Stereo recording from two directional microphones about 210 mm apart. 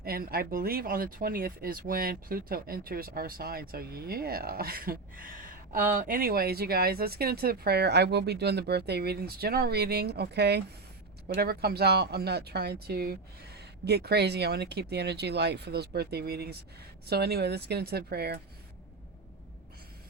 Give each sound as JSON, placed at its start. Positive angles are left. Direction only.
{"t": 0.0, "sound": "speech", "side_deg": -45}